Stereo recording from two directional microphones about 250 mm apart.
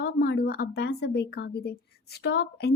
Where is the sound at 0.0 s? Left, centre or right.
Left.